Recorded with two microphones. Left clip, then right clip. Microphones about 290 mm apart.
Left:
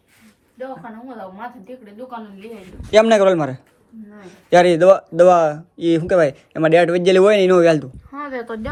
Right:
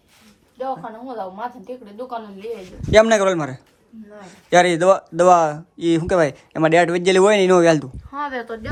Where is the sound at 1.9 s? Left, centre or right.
Centre.